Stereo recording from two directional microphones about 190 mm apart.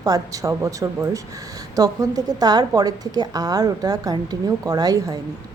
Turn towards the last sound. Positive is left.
turn(degrees=-20)  # may be behind; listen again after turning